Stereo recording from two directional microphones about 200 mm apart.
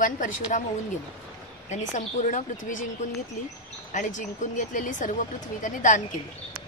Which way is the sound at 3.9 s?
40° left (ahead or behind).